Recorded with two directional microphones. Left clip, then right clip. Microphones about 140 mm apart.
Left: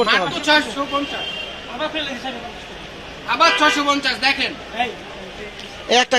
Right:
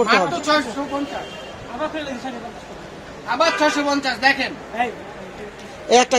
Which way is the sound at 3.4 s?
70° right (ahead or behind).